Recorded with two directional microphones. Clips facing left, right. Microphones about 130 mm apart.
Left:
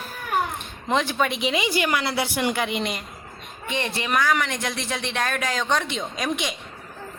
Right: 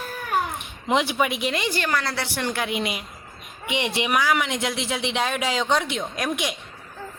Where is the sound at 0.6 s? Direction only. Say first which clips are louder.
Right 1 dB; 15° right (ahead or behind).